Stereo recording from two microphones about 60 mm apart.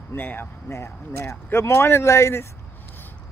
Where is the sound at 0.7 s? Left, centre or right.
Left.